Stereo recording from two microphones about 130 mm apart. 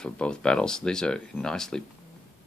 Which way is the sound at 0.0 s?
5° left (ahead or behind).